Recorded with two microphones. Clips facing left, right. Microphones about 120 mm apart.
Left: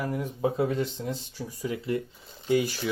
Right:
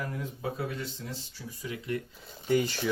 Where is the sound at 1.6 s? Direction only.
35° left (ahead or behind).